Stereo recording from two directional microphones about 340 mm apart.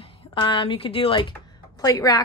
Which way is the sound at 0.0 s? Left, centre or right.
Centre.